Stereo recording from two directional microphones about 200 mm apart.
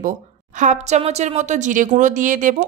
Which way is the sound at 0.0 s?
40° right (ahead or behind).